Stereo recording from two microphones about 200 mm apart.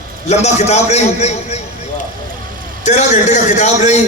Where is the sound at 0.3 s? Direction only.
35° left (ahead or behind).